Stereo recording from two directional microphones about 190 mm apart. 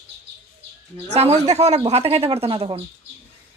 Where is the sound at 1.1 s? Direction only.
35° right (ahead or behind).